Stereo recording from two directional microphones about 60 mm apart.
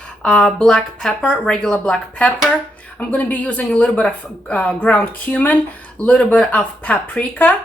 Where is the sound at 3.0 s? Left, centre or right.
Left.